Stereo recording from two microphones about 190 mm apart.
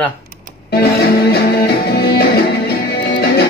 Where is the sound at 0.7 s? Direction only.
55° left (ahead or behind).